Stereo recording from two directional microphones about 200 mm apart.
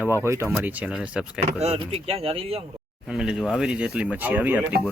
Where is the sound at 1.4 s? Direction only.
30° right (ahead or behind).